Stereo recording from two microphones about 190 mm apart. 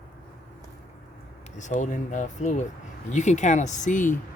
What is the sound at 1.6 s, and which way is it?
Speech, 40° left (ahead or behind).